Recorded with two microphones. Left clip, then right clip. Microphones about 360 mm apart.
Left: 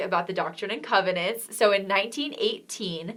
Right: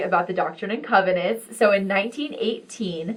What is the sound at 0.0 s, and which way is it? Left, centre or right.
A woman's voice, left.